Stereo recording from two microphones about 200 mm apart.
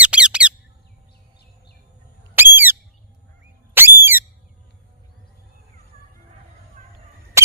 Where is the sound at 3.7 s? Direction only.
10° right (ahead or behind).